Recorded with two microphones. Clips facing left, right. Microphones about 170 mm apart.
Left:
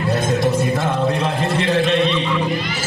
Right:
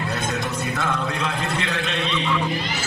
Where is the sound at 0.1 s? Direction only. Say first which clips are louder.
Left 8 dB; 35° left (ahead or behind).